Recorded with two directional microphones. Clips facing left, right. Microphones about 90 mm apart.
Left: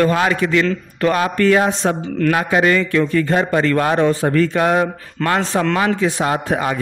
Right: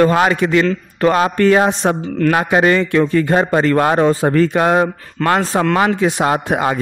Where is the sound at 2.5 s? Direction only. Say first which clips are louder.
Right 2 dB; 30° right (ahead or behind).